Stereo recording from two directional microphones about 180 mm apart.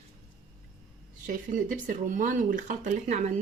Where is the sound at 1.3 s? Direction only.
45° right (ahead or behind).